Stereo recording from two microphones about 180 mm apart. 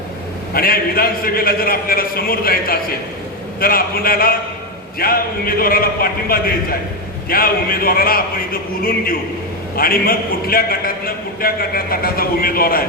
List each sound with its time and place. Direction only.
0.5 s a man's voice: 55° left (ahead or behind)
9.7 s a man's voice: 55° left (ahead or behind)